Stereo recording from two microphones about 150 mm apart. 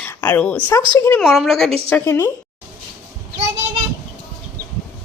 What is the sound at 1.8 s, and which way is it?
Speech, 10° left (ahead or behind).